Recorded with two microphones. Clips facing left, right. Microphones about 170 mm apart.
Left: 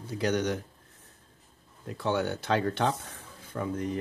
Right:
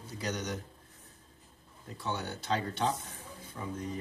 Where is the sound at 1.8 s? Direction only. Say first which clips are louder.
Left 8 dB; 80° left.